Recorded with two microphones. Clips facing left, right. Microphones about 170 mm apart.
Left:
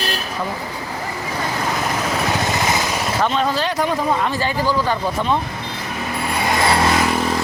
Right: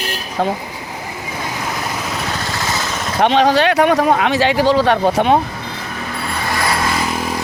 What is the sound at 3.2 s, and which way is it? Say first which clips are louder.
Speech: right 8 dB; 80° right.